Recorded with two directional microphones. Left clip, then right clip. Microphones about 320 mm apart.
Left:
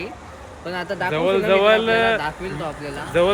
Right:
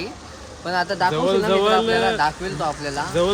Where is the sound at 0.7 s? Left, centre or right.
Centre.